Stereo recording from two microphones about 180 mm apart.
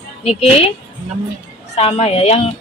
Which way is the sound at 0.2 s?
35° left (ahead or behind).